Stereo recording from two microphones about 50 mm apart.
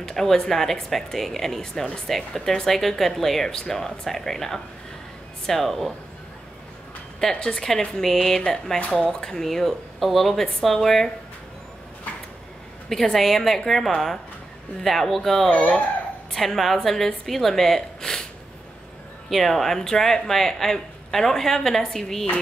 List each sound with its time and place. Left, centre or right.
0.0 s speech: centre
7.3 s speech: centre
12.9 s speech: centre
15.5 s speech: left
16.3 s speech: centre
19.2 s speech: centre